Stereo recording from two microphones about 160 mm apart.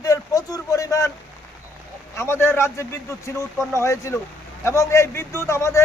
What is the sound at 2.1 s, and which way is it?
A man's voice, 15° left (ahead or behind).